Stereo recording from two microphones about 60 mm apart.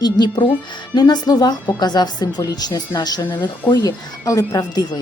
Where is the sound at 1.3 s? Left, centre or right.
Left.